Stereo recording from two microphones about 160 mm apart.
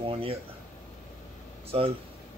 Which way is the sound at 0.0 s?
35° right (ahead or behind).